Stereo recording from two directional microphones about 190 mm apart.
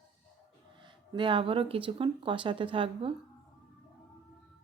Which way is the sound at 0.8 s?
25° right (ahead or behind).